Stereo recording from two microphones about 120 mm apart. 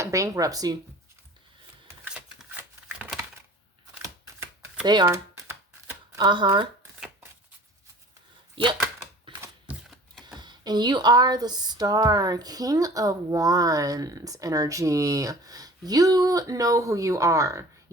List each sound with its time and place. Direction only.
0.0 s speech: 25° right (ahead or behind)
2.0 s shuffling cards: 5° right (ahead or behind)
5.0 s shuffling cards: 25° right (ahead or behind)
6.1 s speech: 40° right (ahead or behind)
8.6 s speech: 45° right (ahead or behind)
10.2 s speech: 40° right (ahead or behind)